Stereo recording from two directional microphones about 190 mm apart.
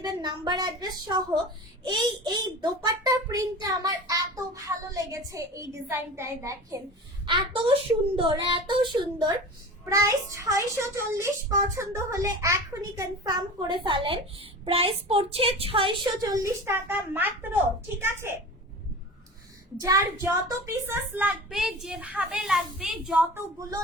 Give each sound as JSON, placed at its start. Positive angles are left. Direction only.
{"t": 0.0, "sound": "a child's voice", "side_deg": -25}
{"t": 19.8, "sound": "a woman's voice", "side_deg": -15}